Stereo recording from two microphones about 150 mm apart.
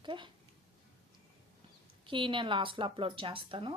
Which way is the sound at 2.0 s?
35° right (ahead or behind).